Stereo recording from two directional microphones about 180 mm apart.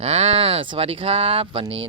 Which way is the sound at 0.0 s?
35° right (ahead or behind).